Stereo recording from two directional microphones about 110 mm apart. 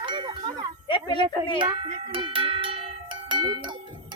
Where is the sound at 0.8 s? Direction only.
50° left (ahead or behind).